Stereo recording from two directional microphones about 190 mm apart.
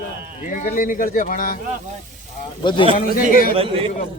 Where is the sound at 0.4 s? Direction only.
40° left (ahead or behind).